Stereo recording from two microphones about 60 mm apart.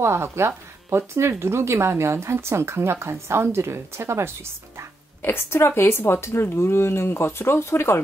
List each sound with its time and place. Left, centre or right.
0.0 s speech: right
5.2 s speech: left